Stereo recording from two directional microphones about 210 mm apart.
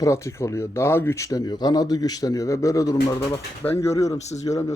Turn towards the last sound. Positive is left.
turn(degrees=15)  # may be behind; listen again after turning